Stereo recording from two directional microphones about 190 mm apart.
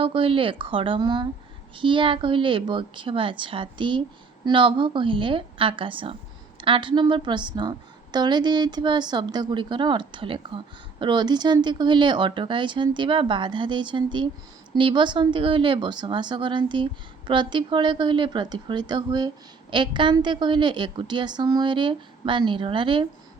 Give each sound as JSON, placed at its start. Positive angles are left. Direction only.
{"t": 0.0, "sound": "speech", "side_deg": -30}